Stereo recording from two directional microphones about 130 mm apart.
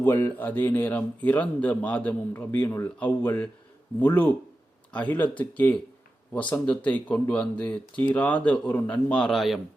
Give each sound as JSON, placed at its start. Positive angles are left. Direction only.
{"t": 0.0, "sound": "speech", "side_deg": 15}